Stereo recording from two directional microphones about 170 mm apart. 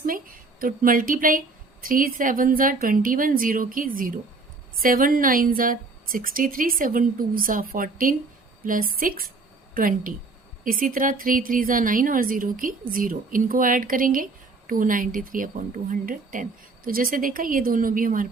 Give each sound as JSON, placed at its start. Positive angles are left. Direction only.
{"t": 0.0, "sound": "a woman's voice", "side_deg": -55}